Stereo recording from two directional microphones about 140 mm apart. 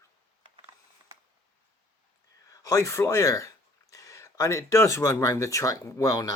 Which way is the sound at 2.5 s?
20° left (ahead or behind).